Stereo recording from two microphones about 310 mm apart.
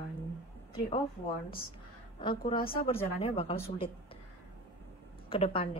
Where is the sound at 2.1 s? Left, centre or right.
Centre.